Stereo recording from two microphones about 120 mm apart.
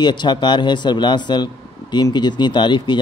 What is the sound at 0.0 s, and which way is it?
A man's voice, 40° left (ahead or behind).